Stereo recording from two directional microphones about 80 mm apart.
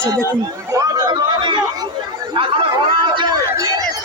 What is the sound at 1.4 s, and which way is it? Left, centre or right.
Chatter, right.